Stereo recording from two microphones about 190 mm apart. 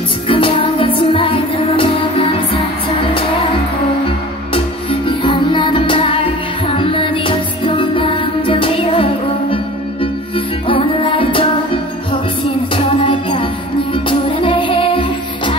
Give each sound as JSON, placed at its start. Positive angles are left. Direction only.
{"t": 0.3, "sound": "music", "side_deg": 25}
{"t": 5.0, "sound": "music", "side_deg": 25}